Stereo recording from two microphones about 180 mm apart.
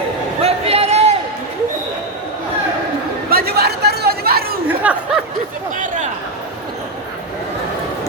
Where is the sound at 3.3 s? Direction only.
60° right (ahead or behind).